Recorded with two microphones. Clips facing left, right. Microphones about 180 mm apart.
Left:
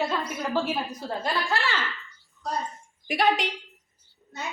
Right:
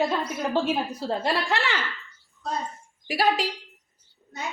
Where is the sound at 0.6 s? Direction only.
25° right (ahead or behind).